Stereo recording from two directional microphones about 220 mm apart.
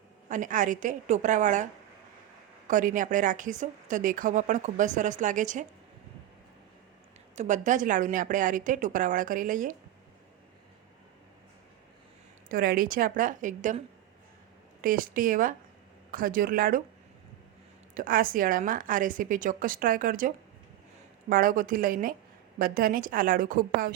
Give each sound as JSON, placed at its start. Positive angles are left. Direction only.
{"t": 0.3, "sound": "a woman's voice", "side_deg": -35}
{"t": 2.6, "sound": "a woman's voice", "side_deg": -35}
{"t": 7.3, "sound": "a woman's voice", "side_deg": -35}
{"t": 12.5, "sound": "a woman's voice", "side_deg": -40}
{"t": 17.9, "sound": "a woman's voice", "side_deg": -40}